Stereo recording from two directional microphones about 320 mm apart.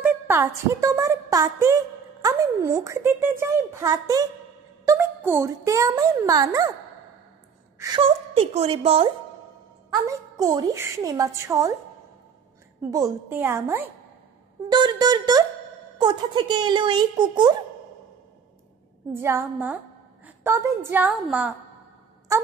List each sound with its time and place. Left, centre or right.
0.0 s speech: centre
7.8 s speech: centre
12.9 s speech: centre
14.7 s music: centre
16.0 s speech: centre
19.1 s a woman's voice: centre